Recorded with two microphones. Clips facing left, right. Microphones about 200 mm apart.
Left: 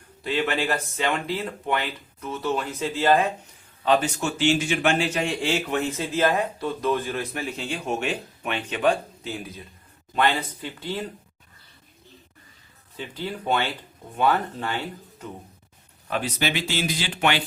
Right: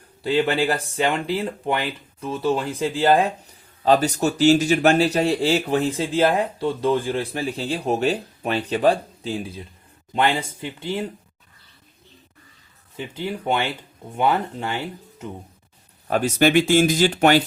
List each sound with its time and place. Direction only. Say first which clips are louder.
0.2 s speech: right 5 dB; 35° right (ahead or behind)
13.0 s speech: right 3 dB; 20° right (ahead or behind)
16.0 s speech: right 8 dB; 45° right (ahead or behind)